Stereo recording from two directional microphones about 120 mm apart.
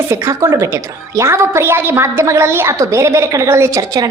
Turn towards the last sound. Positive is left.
turn(degrees=-30)  # may be behind; listen again after turning